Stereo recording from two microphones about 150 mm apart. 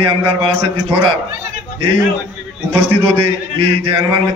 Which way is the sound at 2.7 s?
40° right (ahead or behind).